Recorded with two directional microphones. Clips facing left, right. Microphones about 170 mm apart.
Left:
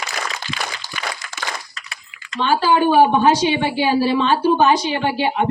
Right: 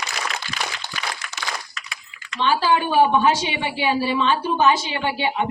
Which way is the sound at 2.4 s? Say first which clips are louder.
Left 3 dB; 35° left (ahead or behind).